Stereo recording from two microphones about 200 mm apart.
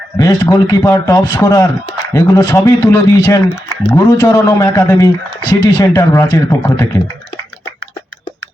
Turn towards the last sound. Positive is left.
turn(degrees=15)  # may be behind; listen again after turning